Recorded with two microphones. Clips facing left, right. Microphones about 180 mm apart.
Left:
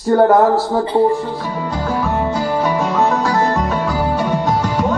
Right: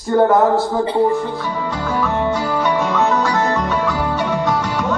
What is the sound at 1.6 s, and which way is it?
Music, 35° left (ahead or behind).